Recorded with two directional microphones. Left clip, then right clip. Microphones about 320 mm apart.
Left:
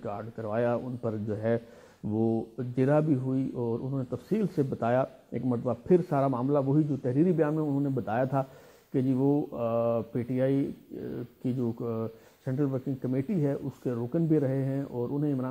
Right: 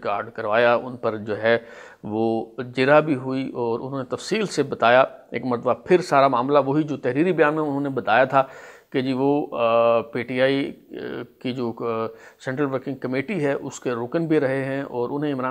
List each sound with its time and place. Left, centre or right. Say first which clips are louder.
0.0 s speech: right 11 dB; centre
2.1 s speech: right 7 dB; right
2.5 s speech: right 12 dB; centre
9.2 s speech: right 8 dB; right
9.6 s speech: right 10 dB; centre